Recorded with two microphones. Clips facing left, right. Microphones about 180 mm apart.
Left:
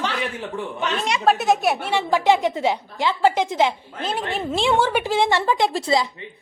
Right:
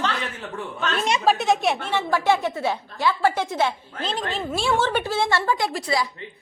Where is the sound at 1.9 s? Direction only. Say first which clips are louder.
Left 4 dB; 15° left (ahead or behind).